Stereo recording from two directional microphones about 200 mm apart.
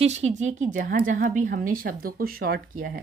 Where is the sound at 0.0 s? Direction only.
35° right (ahead or behind).